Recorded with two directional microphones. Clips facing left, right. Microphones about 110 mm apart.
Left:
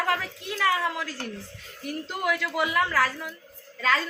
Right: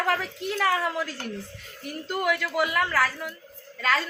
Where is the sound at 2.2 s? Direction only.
Centre (ahead or behind).